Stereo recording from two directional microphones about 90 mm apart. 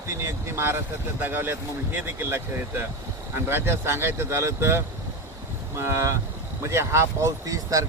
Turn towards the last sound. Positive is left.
turn(degrees=-40)  # may be behind; listen again after turning